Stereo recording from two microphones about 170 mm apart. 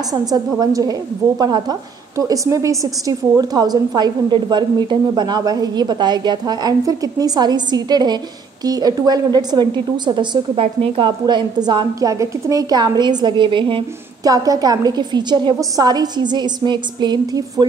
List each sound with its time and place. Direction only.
0.1 s a woman's voice: 20° right (ahead or behind)